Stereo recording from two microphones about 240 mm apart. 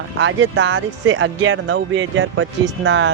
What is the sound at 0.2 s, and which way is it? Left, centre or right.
Speech, right.